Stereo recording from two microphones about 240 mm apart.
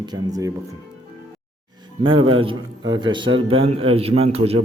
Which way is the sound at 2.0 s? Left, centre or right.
Right.